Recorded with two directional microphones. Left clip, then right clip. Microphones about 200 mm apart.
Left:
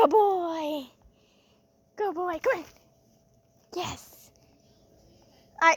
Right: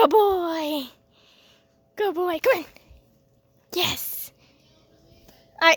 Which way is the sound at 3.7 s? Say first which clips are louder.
Right 9 dB; 35° right (ahead or behind).